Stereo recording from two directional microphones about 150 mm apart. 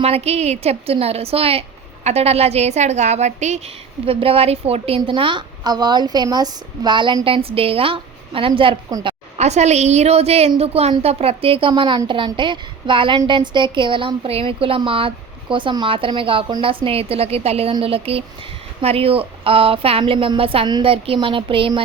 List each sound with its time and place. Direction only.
0.0 s a woman's voice: 45° right (ahead or behind)
4.0 s a woman's voice: 40° right (ahead or behind)
8.9 s a woman's voice: 25° right (ahead or behind)
9.4 s a woman's voice: 50° right (ahead or behind)